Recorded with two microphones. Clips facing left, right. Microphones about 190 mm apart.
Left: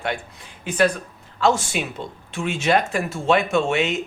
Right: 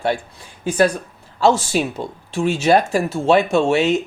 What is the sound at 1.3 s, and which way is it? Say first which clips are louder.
Speech: right 4 dB; 35° right (ahead or behind).